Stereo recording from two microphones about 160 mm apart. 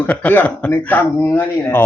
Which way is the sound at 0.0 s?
10° left (ahead or behind).